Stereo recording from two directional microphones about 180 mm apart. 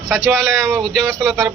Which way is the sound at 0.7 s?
Centre (ahead or behind).